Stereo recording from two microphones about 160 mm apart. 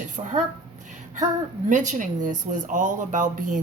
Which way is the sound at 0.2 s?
35° right (ahead or behind).